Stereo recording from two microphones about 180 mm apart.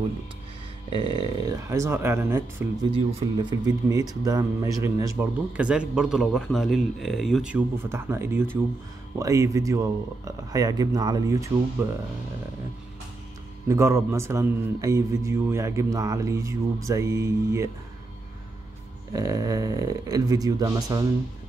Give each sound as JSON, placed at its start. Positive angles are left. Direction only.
{"t": 0.8, "sound": "a man's voice", "side_deg": -25}
{"t": 2.9, "sound": "speech", "side_deg": -25}
{"t": 5.6, "sound": "speech", "side_deg": -5}
{"t": 13.7, "sound": "a man's voice", "side_deg": -15}
{"t": 19.1, "sound": "speech", "side_deg": -20}